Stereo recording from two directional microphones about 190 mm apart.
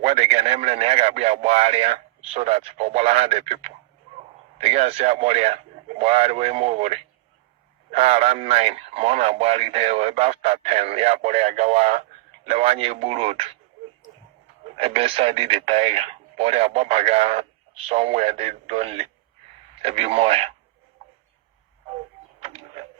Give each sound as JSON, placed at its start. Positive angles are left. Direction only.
{"t": 0.0, "sound": "speech", "side_deg": -35}
{"t": 14.8, "sound": "speech", "side_deg": -30}
{"t": 22.4, "sound": "printer", "side_deg": -30}